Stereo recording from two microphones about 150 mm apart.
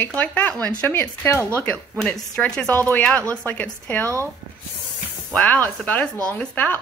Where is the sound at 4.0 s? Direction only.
20° right (ahead or behind).